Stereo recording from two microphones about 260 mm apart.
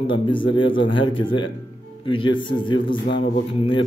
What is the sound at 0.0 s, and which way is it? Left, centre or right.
A man's voice, centre.